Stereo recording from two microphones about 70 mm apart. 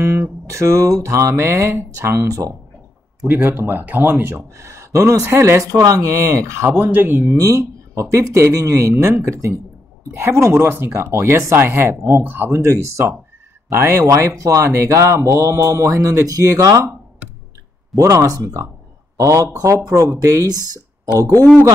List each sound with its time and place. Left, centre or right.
0.0 s speech: right
3.3 s speech: right
4.6 s speech: right
5.2 s speech: right
5.8 s speech: right
6.0 s speech: right
6.8 s speech: right
7.3 s speech: right
12.2 s speech: right
17.9 s a man's voice: right